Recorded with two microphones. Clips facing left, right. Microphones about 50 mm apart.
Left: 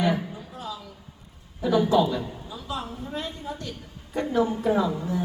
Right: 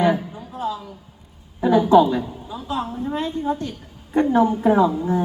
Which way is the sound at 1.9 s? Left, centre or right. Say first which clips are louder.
Right 7 dB; right.